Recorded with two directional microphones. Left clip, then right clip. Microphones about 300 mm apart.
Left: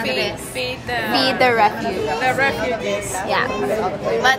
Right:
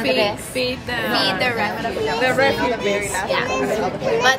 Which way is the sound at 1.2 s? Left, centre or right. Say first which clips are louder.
Left 6 dB; left.